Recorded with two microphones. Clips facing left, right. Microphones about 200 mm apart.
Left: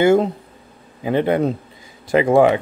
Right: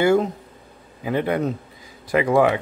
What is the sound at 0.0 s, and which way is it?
Speech, 25° left (ahead or behind).